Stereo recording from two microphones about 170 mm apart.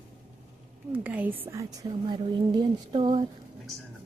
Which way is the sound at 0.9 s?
10° right (ahead or behind).